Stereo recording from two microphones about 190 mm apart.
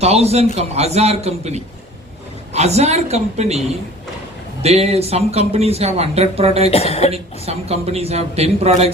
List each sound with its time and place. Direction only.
0.0 s speech: 35° right (ahead or behind)
4.6 s speech: 35° right (ahead or behind)
6.7 s speech: 30° left (ahead or behind)
7.1 s speech: 35° right (ahead or behind)